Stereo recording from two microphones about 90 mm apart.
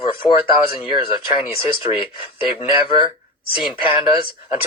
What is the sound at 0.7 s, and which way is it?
Speech, 90° left.